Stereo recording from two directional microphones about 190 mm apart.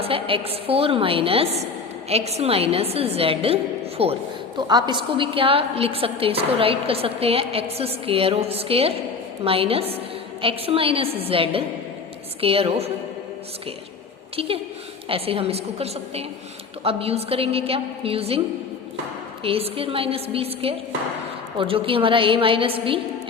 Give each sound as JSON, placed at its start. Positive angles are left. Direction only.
{"t": 0.0, "sound": "a woman's voice", "side_deg": -30}
{"t": 14.3, "sound": "a woman's voice", "side_deg": -30}